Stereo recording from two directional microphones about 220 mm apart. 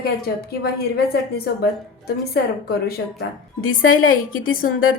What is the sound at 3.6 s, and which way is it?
Speech, 65° left (ahead or behind).